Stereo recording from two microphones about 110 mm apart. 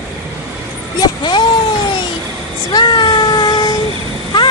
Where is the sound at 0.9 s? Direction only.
45° left (ahead or behind).